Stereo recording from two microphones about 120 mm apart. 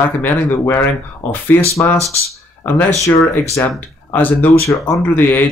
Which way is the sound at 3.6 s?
20° left (ahead or behind).